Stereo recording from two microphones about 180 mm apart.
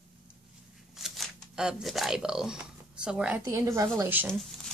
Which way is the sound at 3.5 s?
15° right (ahead or behind).